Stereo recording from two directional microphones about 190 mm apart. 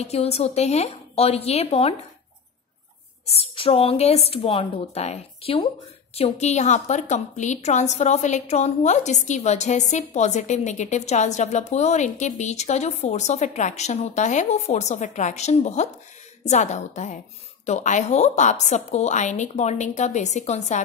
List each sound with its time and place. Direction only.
0.0 s a woman's voice: 35° left (ahead or behind)
3.3 s a woman's voice: 30° left (ahead or behind)